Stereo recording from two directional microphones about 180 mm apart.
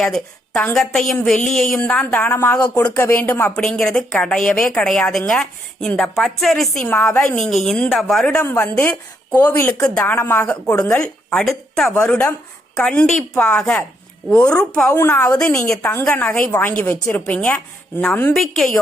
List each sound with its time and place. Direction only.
0.0 s a woman's voice: 5° left (ahead or behind)
8.4 s a woman's voice: 15° left (ahead or behind)